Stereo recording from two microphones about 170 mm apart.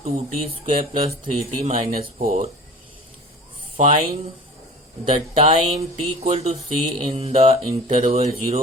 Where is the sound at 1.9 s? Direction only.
60° right (ahead or behind).